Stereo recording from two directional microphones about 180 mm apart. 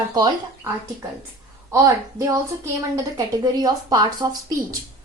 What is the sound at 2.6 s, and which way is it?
A woman's voice, 20° right (ahead or behind).